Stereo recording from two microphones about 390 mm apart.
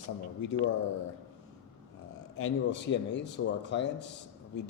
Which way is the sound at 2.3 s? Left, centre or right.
Left.